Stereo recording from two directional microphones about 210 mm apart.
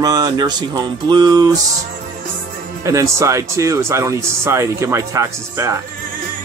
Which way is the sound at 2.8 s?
15° right (ahead or behind).